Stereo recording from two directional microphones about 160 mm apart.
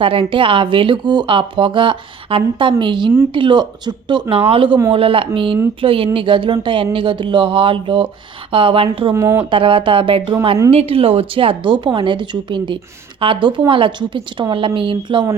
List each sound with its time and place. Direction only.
0.0 s speech: 35° right (ahead or behind)
9.1 s speech: 15° right (ahead or behind)
9.5 s speech: 30° right (ahead or behind)